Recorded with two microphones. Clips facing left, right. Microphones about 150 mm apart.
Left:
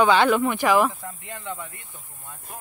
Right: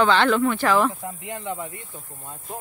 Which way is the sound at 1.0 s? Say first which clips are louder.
Right 4 dB; 20° right (ahead or behind).